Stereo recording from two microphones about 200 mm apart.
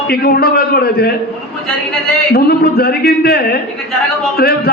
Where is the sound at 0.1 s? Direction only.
50° left (ahead or behind).